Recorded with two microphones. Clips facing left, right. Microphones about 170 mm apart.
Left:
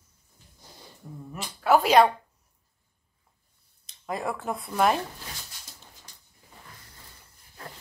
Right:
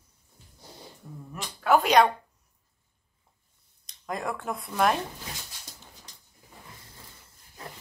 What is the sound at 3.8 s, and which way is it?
Speech, 5° left (ahead or behind).